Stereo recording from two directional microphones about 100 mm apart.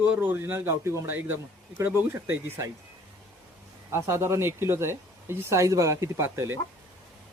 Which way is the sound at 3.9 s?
30° right (ahead or behind).